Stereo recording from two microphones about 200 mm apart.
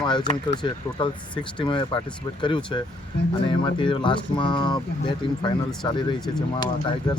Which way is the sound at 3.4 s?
25° left (ahead or behind).